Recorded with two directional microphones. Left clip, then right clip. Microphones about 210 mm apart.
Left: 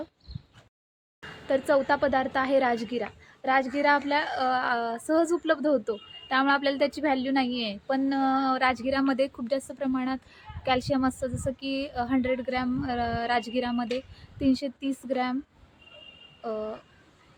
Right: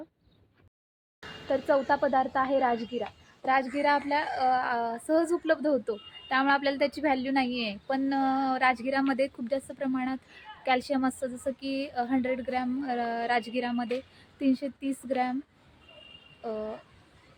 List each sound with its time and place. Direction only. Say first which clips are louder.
1.5 s a woman's voice: left 2 dB; 20° left (ahead or behind)
3.0 s a woman's voice: left 2 dB; 5° left (ahead or behind)
16.4 s speech: left 2 dB; 5° left (ahead or behind)